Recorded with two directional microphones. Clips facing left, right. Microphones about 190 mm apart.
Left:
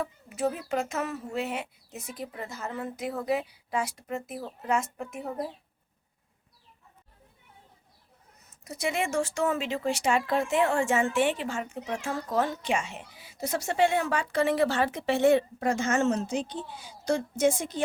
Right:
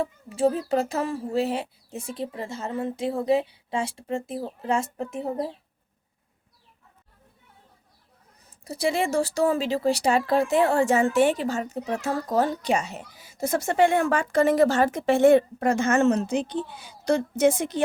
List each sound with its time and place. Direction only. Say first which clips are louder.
0.0 s a child's voice: right 6 dB; 30° right (ahead or behind)
8.4 s speech: right 6 dB; 35° right (ahead or behind); by 17.8 s 65° right (ahead or behind)